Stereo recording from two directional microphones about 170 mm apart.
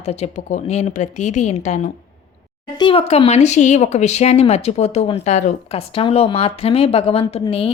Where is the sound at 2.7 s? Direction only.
30° left (ahead or behind).